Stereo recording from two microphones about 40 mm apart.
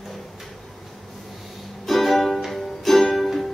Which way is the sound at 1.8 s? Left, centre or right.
Centre.